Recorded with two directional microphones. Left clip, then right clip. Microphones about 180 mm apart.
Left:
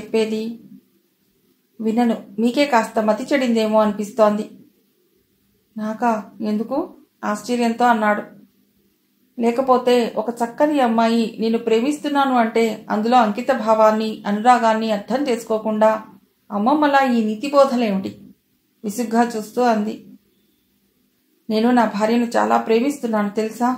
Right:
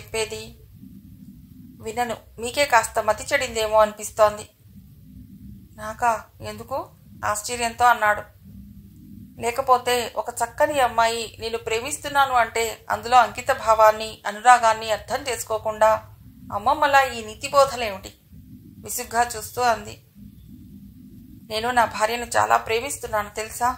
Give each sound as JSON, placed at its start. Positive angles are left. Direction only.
{"t": 0.1, "sound": "speech", "side_deg": -30}
{"t": 1.8, "sound": "speech", "side_deg": -30}
{"t": 5.8, "sound": "speech", "side_deg": -35}
{"t": 9.4, "sound": "speech", "side_deg": -30}
{"t": 21.5, "sound": "speech", "side_deg": -35}